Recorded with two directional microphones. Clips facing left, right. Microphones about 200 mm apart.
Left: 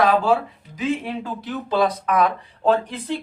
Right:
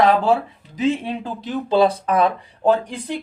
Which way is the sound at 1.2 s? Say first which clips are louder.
Right 3 dB; 25° right (ahead or behind).